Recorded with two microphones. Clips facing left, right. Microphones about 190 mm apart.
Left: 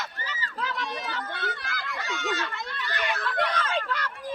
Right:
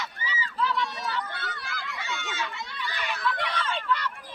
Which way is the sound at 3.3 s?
45° left (ahead or behind).